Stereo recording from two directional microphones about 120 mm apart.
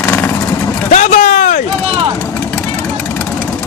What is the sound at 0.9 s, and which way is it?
Speech, 90° left.